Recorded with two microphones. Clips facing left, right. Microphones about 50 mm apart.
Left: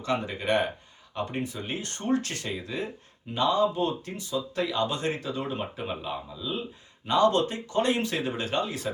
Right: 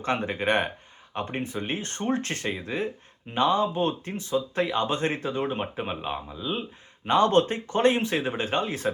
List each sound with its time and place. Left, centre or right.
0.0 s speech: right